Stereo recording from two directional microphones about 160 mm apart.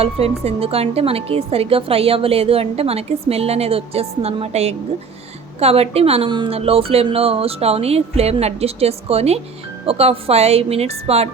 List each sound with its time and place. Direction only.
0.0 s a woman's voice: 40° right (ahead or behind)